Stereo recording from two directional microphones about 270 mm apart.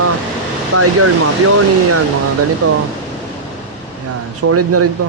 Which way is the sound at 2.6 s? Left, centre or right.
Right.